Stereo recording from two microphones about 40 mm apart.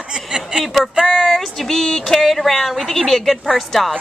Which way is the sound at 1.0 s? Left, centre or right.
Centre.